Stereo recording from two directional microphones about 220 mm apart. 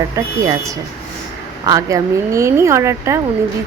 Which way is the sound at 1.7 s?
15° right (ahead or behind).